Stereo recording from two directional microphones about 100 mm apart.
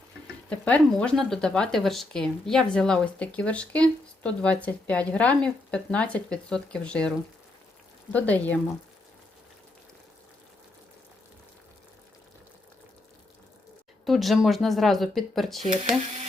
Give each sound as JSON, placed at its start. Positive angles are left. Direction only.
{"t": 0.5, "sound": "speech", "side_deg": 10}
{"t": 8.1, "sound": "speech", "side_deg": 15}
{"t": 14.0, "sound": "speech", "side_deg": 0}